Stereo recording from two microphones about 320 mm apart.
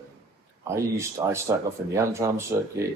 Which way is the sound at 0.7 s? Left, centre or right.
Centre.